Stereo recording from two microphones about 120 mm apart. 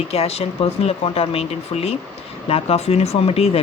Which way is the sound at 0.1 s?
60° left (ahead or behind).